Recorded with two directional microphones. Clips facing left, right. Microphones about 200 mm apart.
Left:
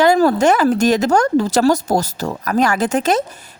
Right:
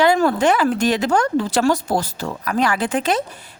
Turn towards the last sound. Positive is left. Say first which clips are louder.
# left 4 dB
turn(degrees=45)  # may be behind; listen again after turning